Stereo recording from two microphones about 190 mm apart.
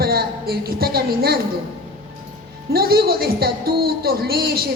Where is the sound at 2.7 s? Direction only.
55° right (ahead or behind).